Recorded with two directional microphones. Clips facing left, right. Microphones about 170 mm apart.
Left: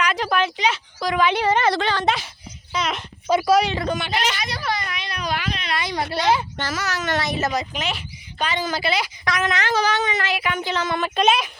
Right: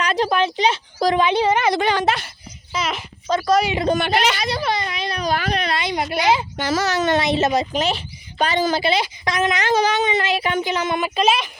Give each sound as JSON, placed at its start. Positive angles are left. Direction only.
{"t": 0.0, "sound": "a sound", "side_deg": -35}
{"t": 0.3, "sound": "speech", "side_deg": -25}
{"t": 1.2, "sound": "a woman's voice", "side_deg": -15}
{"t": 2.0, "sound": "speech", "side_deg": 0}
{"t": 2.7, "sound": "a sound", "side_deg": -5}
{"t": 3.2, "sound": "speech", "side_deg": 10}
{"t": 3.9, "sound": "speech", "side_deg": -60}
{"t": 4.4, "sound": "a sound", "side_deg": -25}
{"t": 5.7, "sound": "a woman's voice", "side_deg": -25}
{"t": 6.7, "sound": "a woman's voice", "side_deg": -30}
{"t": 8.7, "sound": "a woman's voice", "side_deg": -25}
{"t": 10.6, "sound": "a woman's voice", "side_deg": -15}
{"t": 11.1, "sound": "speech", "side_deg": -5}